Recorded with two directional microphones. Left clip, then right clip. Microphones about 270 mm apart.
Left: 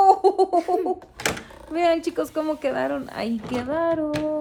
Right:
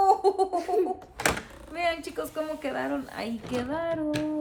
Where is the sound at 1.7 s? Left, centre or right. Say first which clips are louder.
Left 8 dB; left.